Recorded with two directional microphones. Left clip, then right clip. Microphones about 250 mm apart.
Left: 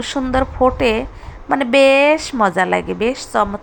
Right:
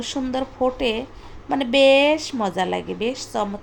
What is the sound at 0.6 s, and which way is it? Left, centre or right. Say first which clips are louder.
Speech: left 7 dB; left.